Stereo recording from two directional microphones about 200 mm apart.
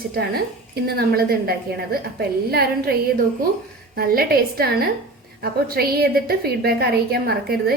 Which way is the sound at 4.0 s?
50° right (ahead or behind).